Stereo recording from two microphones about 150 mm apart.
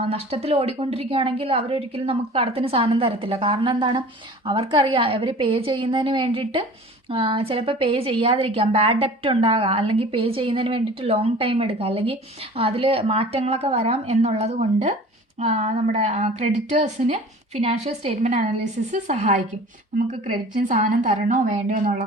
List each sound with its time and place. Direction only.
0.0 s a woman's voice: 40° right (ahead or behind)
20.7 s a woman's voice: 50° right (ahead or behind)